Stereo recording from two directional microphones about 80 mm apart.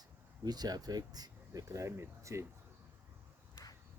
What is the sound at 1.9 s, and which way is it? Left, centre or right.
Speech, right.